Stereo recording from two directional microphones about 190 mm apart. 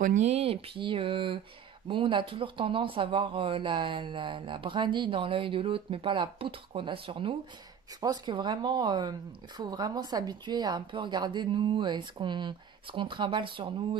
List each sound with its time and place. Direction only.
0.0 s speech: 40° right (ahead or behind)